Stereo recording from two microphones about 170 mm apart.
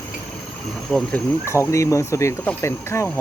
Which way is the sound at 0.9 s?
10° left (ahead or behind).